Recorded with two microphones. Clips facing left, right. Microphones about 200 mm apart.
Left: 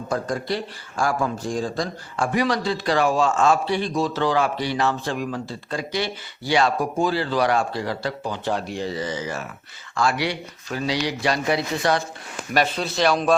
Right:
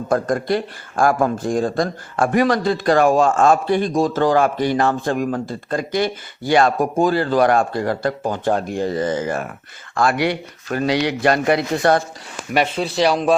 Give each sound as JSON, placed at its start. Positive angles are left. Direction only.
{"t": 0.1, "sound": "speech", "side_deg": -50}
{"t": 12.5, "sound": "speech", "side_deg": -25}